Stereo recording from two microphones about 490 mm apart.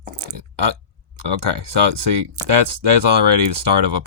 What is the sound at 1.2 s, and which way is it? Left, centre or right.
Speech, right.